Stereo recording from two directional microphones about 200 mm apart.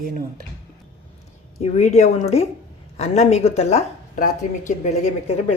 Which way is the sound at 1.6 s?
35° left (ahead or behind).